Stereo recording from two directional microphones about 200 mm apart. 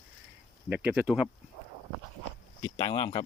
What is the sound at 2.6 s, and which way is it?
Speech, 20° left (ahead or behind).